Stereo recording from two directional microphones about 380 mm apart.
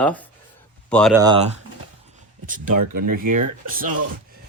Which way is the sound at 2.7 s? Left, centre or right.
Right.